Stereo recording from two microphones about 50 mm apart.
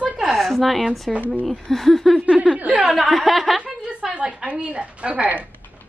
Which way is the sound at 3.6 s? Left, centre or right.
Right.